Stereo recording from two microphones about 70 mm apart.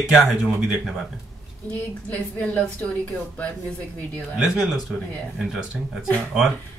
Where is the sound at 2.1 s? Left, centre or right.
Left.